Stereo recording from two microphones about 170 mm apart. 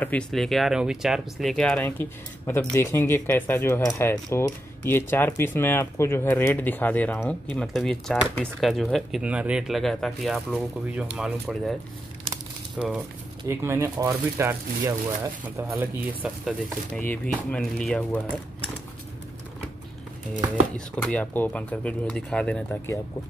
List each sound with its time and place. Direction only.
0.0 s speech: 5° left (ahead or behind)
12.7 s speech: centre (ahead or behind)
13.5 s speech: 15° right (ahead or behind)
16.2 s speech: 5° right (ahead or behind)
17.0 s speech: 10° left (ahead or behind)
20.7 s speech: 5° left (ahead or behind)